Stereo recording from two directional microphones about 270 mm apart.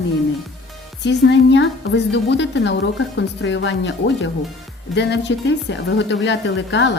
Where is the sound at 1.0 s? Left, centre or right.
Left.